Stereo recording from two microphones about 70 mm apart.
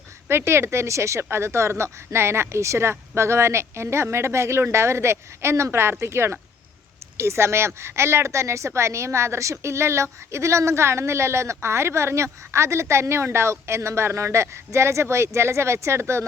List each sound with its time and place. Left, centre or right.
0.3 s a woman's voice: right